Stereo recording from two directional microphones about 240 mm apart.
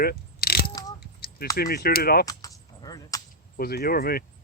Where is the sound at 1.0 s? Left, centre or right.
Left.